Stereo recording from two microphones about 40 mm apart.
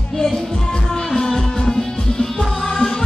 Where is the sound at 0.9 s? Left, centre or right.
Centre.